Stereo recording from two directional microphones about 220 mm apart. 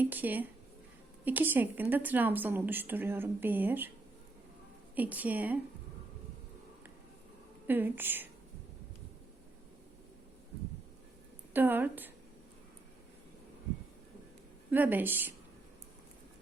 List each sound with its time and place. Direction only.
0.0 s a woman's voice: 10° right (ahead or behind)
4.9 s a woman's voice: 5° right (ahead or behind)
7.7 s a woman's voice: 10° right (ahead or behind)
11.5 s a woman's voice: 10° right (ahead or behind)
14.7 s a woman's voice: 10° right (ahead or behind)